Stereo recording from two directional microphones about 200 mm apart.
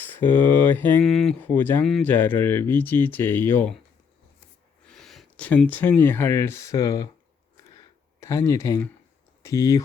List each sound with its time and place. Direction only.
0.0 s a sound: 10° left (ahead or behind)
0.7 s speech: 10° left (ahead or behind)
4.9 s speech: centre (ahead or behind); by 7.1 s 20° left (ahead or behind)
8.2 s speech: 15° left (ahead or behind)